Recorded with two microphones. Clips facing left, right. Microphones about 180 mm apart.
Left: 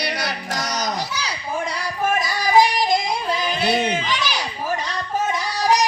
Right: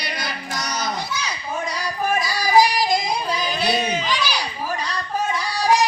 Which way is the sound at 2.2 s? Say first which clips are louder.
Even; 20° left (ahead or behind).